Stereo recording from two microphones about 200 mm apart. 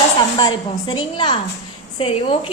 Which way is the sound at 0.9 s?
25° left (ahead or behind).